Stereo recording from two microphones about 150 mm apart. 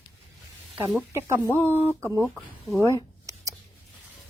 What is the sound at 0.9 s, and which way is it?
Speech, 20° right (ahead or behind).